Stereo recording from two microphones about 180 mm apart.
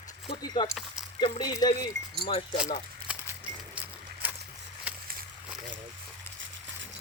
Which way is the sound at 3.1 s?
5° right (ahead or behind).